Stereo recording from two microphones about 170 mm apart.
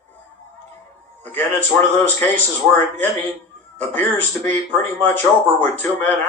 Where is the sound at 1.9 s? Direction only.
10° left (ahead or behind).